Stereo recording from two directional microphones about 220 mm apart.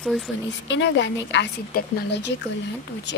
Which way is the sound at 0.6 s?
55° left (ahead or behind).